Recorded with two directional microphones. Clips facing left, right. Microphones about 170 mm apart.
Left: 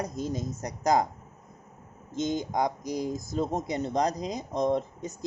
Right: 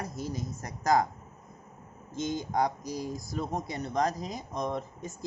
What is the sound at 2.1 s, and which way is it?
Speech, 20° left (ahead or behind).